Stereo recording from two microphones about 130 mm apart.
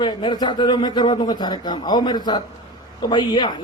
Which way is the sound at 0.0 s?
35° left (ahead or behind).